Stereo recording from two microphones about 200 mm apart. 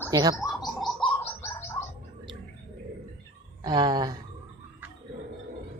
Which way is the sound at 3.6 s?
20° right (ahead or behind).